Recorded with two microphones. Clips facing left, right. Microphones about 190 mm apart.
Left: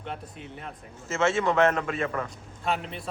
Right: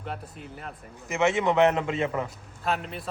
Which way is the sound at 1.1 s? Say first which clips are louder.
Right 1 dB; 15° right (ahead or behind).